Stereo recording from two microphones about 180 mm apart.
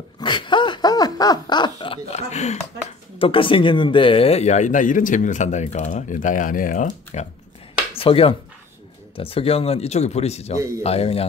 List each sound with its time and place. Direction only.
0.2 s a sound: 25° left (ahead or behind)
3.2 s speech: 30° left (ahead or behind); by 7.2 s 45° left (ahead or behind)
8.0 s speech: 30° left (ahead or behind)